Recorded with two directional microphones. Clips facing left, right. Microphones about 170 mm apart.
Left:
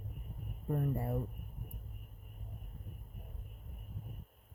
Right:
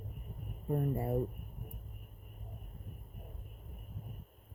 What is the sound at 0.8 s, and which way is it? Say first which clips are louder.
Speech: right 3 dB; 20° right (ahead or behind).